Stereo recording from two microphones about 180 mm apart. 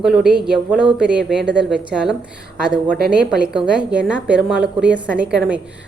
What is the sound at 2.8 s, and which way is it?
Speech, 60° right (ahead or behind).